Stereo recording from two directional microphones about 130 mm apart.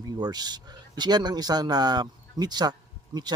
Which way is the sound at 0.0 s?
30° right (ahead or behind).